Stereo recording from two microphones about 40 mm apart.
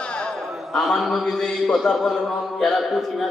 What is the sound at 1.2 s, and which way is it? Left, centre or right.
Mantra, centre.